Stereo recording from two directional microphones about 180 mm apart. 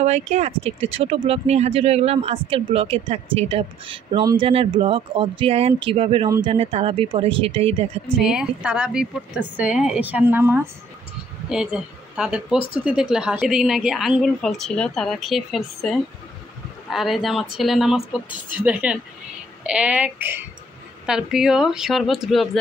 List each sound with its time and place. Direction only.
0.0 s speech: 40° right (ahead or behind)
8.2 s a woman's voice: 5° right (ahead or behind)